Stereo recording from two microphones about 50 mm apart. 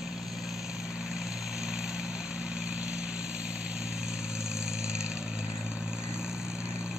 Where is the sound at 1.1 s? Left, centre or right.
Centre.